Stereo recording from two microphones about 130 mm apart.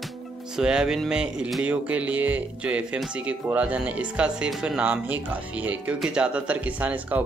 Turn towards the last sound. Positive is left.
turn(degrees=-10)  # may be behind; listen again after turning